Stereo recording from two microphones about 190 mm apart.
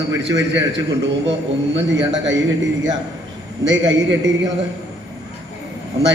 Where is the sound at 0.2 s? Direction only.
70° right (ahead or behind).